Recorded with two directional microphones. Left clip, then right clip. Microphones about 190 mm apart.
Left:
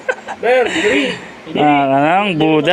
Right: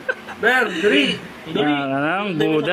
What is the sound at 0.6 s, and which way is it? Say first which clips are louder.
A man's voice: left 3 dB; 20° left (ahead or behind).